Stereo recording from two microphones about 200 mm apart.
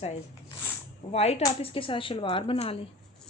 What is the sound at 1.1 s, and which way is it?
Speech, 30° left (ahead or behind).